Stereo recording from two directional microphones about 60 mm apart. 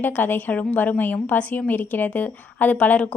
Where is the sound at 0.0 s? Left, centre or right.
Left.